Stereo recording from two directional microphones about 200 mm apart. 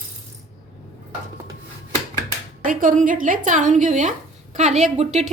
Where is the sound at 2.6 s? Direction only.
40° right (ahead or behind).